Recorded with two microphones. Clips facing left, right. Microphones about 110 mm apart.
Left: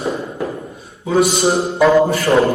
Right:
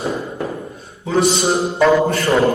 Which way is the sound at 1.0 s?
5° left (ahead or behind).